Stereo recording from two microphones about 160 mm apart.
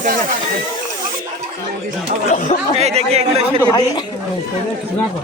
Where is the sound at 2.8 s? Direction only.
40° right (ahead or behind).